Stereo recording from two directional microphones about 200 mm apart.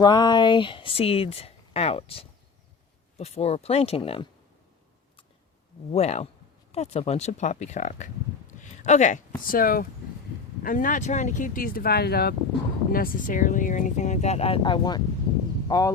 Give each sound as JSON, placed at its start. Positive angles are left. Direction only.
{"t": 0.0, "sound": "speech", "side_deg": 20}
{"t": 5.9, "sound": "speech", "side_deg": 35}